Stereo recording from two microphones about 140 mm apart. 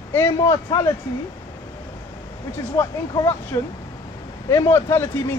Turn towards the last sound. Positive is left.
turn(degrees=15)  # may be behind; listen again after turning